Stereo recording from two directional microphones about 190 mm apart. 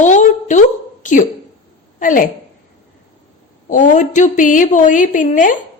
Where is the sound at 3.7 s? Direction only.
40° left (ahead or behind).